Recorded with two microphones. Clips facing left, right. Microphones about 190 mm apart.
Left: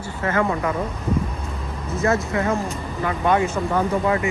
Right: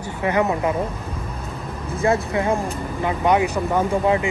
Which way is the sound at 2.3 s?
15° right (ahead or behind).